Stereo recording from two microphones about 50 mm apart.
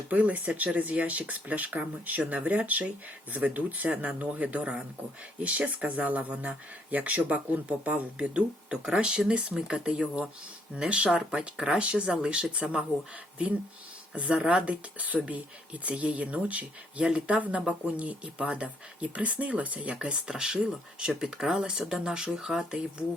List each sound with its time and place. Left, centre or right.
0.1 s speech: right
14.2 s speech: right